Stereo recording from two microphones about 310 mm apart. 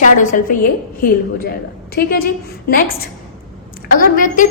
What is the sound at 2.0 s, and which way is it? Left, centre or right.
Speech, left.